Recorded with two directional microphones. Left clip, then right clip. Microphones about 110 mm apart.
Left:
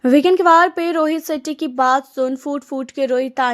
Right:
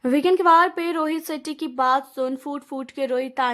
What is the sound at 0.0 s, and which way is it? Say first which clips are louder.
Speech: left 5 dB; 40° left (ahead or behind).